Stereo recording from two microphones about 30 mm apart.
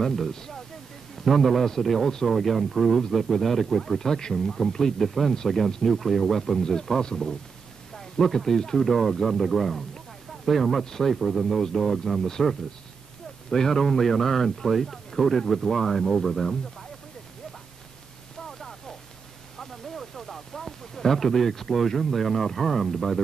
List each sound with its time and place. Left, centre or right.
0.0 s speech: centre
0.3 s speech: centre
1.1 s a man's voice: centre
6.6 s speech: centre
7.9 s a sound: centre
8.7 s speech: centre
13.5 s speech: centre
18.5 s a sound: centre
19.6 s speech: centre